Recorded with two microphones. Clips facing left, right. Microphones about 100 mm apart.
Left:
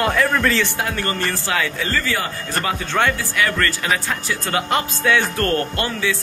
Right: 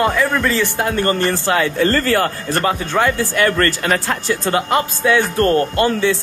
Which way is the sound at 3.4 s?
40° right (ahead or behind).